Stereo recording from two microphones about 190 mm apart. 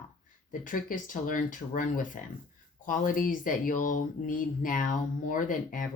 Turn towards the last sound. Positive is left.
turn(degrees=45)  # may be behind; listen again after turning